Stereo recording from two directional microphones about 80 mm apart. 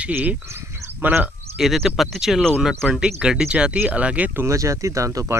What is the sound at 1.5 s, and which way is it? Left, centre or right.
Speech, centre.